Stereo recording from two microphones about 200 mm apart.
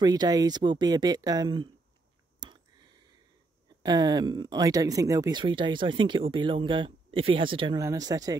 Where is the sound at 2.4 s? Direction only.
20° right (ahead or behind).